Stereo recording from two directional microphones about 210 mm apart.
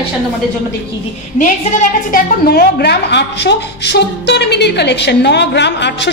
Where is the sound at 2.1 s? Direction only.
45° left (ahead or behind).